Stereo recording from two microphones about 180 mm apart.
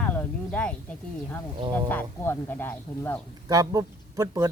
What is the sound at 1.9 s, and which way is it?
Speech, 10° left (ahead or behind).